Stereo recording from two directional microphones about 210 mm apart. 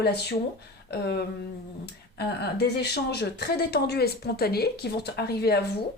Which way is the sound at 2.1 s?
50° left (ahead or behind).